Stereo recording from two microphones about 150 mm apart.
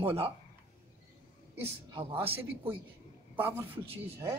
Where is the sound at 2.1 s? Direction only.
40° right (ahead or behind).